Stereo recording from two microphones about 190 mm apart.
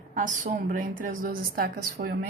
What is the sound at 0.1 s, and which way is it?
A woman's voice, 45° right (ahead or behind).